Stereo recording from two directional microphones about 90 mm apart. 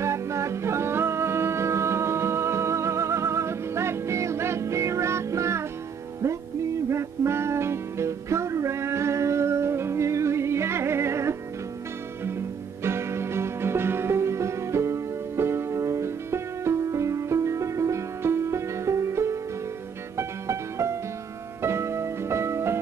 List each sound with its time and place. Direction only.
0.0 s music: 30° right (ahead or behind)
6.9 s music: 30° right (ahead or behind)